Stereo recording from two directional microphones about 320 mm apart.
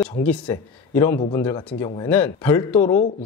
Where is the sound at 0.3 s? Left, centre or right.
Centre.